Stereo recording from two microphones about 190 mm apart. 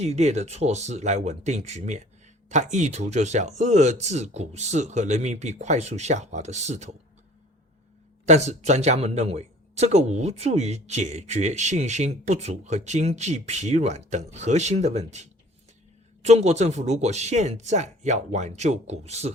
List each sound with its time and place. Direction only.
0.0 s speech: 35° right (ahead or behind)
8.3 s speech: 35° right (ahead or behind)